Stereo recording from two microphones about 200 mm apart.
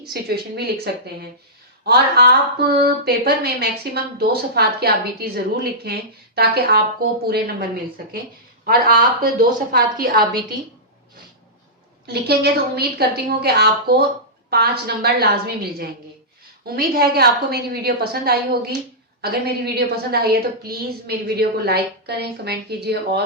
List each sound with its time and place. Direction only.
0.1 s a woman's voice: 55° right (ahead or behind)
8.6 s a woman's voice: 45° right (ahead or behind)
12.0 s a woman's voice: 55° right (ahead or behind)